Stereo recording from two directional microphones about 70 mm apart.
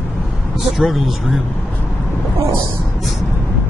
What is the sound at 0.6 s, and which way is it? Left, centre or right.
Speech, centre.